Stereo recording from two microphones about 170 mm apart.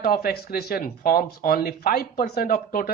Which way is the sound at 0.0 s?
60° left (ahead or behind).